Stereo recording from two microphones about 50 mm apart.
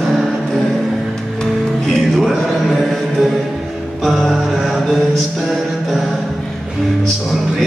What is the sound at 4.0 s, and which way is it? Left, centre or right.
Mantra, centre.